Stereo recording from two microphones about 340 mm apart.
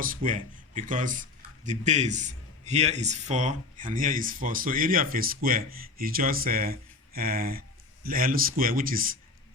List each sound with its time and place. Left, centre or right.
0.0 s speech: right